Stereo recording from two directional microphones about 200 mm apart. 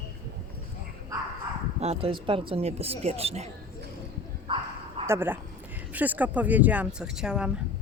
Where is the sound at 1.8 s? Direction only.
30° right (ahead or behind).